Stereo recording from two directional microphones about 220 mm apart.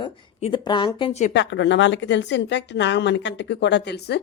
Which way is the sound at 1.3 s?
55° left (ahead or behind).